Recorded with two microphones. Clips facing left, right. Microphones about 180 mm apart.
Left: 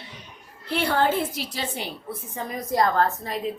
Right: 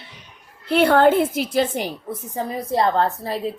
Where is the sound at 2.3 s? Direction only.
30° right (ahead or behind).